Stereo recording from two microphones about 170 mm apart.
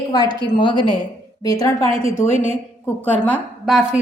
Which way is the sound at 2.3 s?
40° right (ahead or behind).